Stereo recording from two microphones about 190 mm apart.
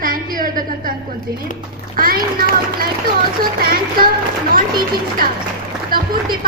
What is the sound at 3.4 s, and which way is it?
Speech, 50° right (ahead or behind).